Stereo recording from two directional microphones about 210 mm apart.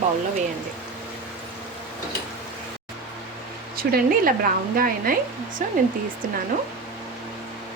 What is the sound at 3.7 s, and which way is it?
Speech, 45° right (ahead or behind).